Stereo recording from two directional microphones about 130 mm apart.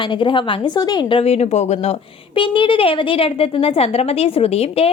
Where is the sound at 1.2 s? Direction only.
55° left (ahead or behind).